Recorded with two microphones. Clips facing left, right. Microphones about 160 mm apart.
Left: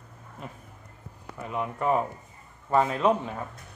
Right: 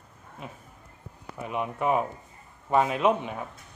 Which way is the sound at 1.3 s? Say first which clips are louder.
Right 1 dB; 15° right (ahead or behind).